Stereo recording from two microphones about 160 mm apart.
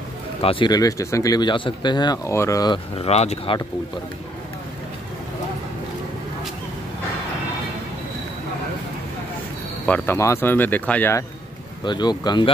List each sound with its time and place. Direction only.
0.4 s speech: 35° left (ahead or behind)
3.0 s speech: 40° left (ahead or behind)
9.8 s speech: 10° left (ahead or behind)
11.8 s speech: 25° left (ahead or behind)